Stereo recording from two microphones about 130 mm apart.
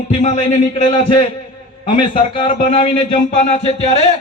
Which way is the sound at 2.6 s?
60° left (ahead or behind).